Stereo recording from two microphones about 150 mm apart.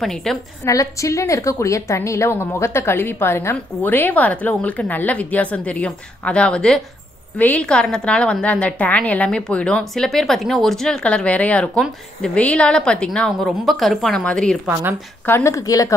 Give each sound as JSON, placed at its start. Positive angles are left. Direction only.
{"t": 0.0, "sound": "a woman's voice", "side_deg": 0}
{"t": 0.7, "sound": "a woman's voice", "side_deg": 20}
{"t": 14.7, "sound": "a woman's voice", "side_deg": -15}
{"t": 15.2, "sound": "a woman's voice", "side_deg": 15}